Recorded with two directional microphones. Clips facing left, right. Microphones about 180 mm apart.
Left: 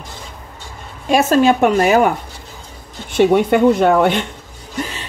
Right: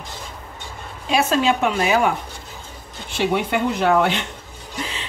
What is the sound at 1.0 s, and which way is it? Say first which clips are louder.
Speech: left 6 dB; 45° left (ahead or behind).